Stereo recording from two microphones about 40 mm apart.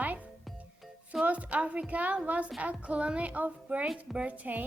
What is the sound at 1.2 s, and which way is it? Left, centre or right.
A woman's voice, right.